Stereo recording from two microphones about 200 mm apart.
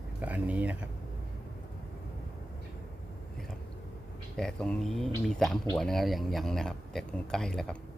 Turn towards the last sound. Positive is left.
turn(degrees=5)  # may be behind; listen again after turning